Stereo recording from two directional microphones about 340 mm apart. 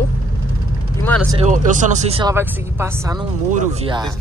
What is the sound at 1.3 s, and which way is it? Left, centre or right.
Speech, right.